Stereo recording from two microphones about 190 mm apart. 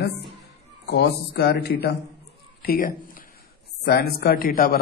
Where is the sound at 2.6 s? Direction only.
50° left (ahead or behind).